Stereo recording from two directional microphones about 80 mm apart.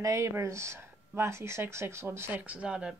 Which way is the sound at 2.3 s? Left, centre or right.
Centre.